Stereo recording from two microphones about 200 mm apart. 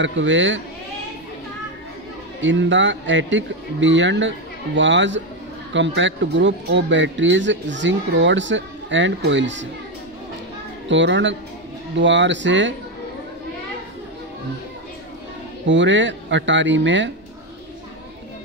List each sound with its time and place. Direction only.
0.0 s speech: 65° right (ahead or behind)
2.4 s speech: 65° right (ahead or behind)
10.9 s speech: 65° right (ahead or behind)
15.6 s speech: 65° right (ahead or behind)